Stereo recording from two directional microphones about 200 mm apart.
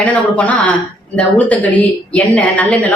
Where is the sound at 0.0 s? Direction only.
5° left (ahead or behind).